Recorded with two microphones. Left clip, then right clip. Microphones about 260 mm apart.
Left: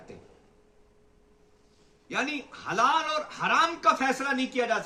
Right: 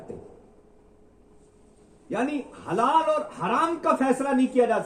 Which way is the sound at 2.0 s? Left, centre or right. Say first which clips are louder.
Right 2 dB; left.